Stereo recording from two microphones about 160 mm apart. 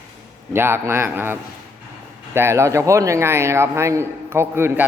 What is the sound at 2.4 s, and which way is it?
A man's voice, 15° right (ahead or behind).